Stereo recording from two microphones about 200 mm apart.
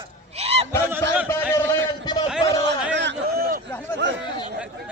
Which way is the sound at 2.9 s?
60° right (ahead or behind).